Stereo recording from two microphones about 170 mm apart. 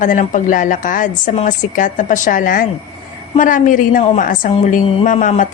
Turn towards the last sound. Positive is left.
turn(degrees=50)  # may be behind; listen again after turning